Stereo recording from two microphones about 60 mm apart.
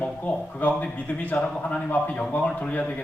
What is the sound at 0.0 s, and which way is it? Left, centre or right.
A man's voice, left.